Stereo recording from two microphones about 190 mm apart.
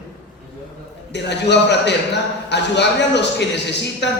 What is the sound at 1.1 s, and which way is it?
A man's voice, 65° left (ahead or behind).